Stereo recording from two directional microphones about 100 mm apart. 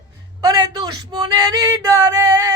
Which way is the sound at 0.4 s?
40° right (ahead or behind).